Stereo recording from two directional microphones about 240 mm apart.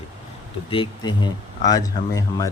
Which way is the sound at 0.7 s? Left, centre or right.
Centre.